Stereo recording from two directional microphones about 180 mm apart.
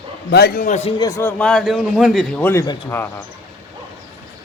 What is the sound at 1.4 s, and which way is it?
A man's voice, 5° left (ahead or behind).